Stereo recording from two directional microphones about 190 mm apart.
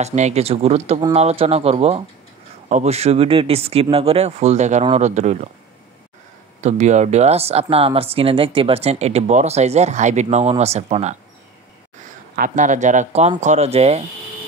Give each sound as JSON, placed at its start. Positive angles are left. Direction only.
{"t": 0.0, "sound": "speech", "side_deg": -35}
{"t": 6.6, "sound": "speech", "side_deg": -35}
{"t": 12.4, "sound": "speech", "side_deg": -45}